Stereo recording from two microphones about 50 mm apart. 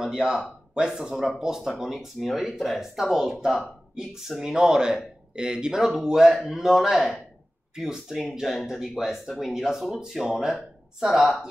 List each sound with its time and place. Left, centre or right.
0.0 s speech: centre
1.1 s speech: centre